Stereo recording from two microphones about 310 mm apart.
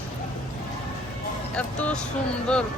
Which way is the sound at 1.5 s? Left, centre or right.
Centre.